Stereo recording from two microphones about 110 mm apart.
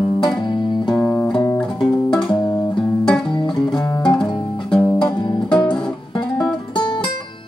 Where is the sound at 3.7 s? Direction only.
10° left (ahead or behind).